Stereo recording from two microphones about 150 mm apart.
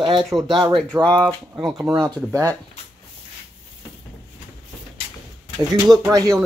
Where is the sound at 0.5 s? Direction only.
30° right (ahead or behind).